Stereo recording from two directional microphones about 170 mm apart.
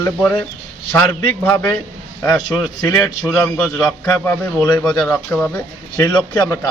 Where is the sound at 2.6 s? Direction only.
20° left (ahead or behind).